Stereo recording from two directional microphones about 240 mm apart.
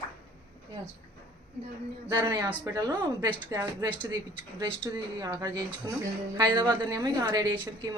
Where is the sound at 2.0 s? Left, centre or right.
Centre.